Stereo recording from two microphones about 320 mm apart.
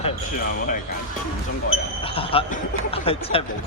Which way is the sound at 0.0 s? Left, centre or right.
Left.